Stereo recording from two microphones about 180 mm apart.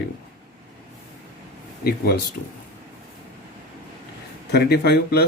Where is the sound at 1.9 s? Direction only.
60° left (ahead or behind).